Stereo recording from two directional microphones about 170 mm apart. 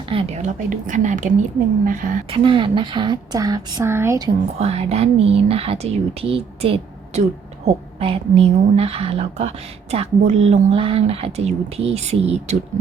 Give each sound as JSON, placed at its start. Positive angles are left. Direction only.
{"t": 0.1, "sound": "a woman's voice", "side_deg": -35}
{"t": 2.3, "sound": "a woman's voice", "side_deg": -30}
{"t": 4.6, "sound": "a woman's voice", "side_deg": -35}